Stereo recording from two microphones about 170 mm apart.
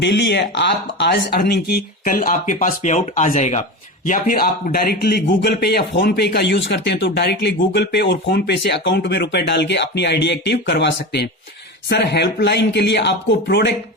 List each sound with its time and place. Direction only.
0.0 s a man's voice: 90° left